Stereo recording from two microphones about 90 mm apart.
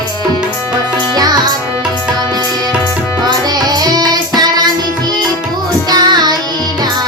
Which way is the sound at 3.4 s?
50° right (ahead or behind).